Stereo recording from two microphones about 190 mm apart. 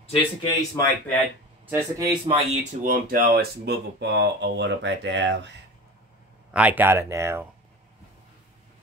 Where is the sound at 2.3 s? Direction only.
35° right (ahead or behind); by 5.4 s 70° right (ahead or behind).